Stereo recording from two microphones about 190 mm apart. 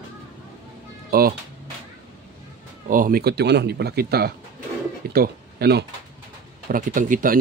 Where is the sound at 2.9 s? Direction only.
50° right (ahead or behind).